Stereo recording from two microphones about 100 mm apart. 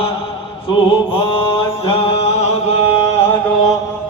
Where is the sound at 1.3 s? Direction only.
60° left (ahead or behind); by 2.7 s 90° left.